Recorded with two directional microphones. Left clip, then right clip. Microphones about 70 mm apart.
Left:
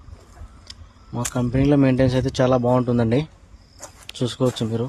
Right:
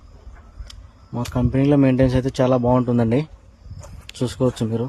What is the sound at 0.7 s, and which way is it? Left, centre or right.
Speech, right.